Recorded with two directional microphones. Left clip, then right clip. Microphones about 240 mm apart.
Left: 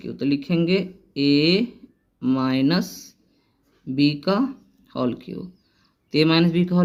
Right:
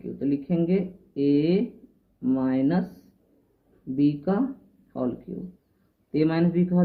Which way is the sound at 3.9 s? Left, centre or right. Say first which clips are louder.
Left 4 dB; left.